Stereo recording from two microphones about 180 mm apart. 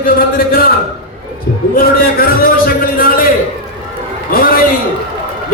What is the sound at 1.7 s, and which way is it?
A man's voice, 55° left (ahead or behind).